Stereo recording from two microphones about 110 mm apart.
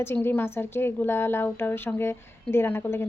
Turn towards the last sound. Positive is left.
turn(degrees=20)  # may be behind; listen again after turning